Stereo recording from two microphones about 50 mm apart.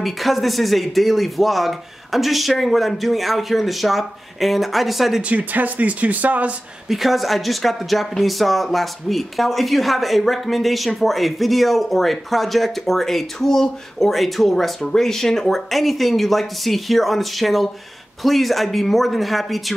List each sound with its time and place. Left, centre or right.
0.0 s speech: centre
5.3 s speech: right
6.9 s speech: centre